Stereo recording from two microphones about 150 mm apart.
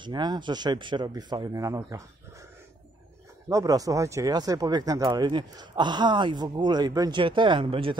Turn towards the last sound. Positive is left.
turn(degrees=-35)  # may be behind; listen again after turning